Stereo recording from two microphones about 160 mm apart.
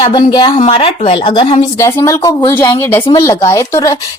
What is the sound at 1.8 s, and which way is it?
Speech, 20° left (ahead or behind).